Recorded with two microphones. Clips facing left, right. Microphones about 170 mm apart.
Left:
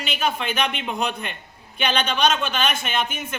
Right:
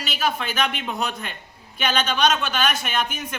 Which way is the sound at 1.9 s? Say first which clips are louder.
Even; 5° right (ahead or behind).